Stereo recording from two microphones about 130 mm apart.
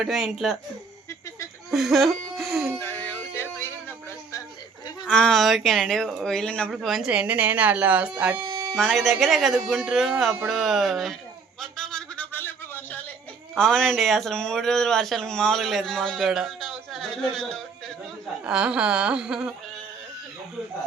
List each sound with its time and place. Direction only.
0.0 s speech: 5° right (ahead or behind)
1.7 s a sound: centre (ahead or behind)
2.8 s music: 15° left (ahead or behind)
5.1 s speech: 5° left (ahead or behind)
8.7 s speech: centre (ahead or behind)
11.6 s a sound: 5° left (ahead or behind)
13.6 s speech: 5° left (ahead or behind)
18.4 s speech: 5° right (ahead or behind)